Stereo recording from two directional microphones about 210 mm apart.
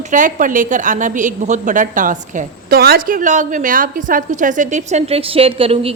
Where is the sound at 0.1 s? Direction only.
40° right (ahead or behind).